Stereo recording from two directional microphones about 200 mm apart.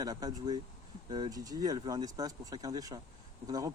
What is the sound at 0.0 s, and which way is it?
Speech, 20° right (ahead or behind).